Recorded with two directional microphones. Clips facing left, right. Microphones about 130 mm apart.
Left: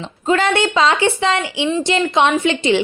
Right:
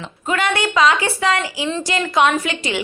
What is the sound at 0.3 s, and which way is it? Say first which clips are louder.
A woman's voice: left 4 dB; 30° left (ahead or behind).